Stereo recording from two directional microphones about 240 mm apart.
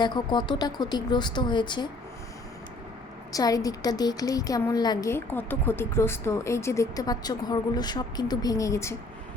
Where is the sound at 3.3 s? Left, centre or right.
Centre.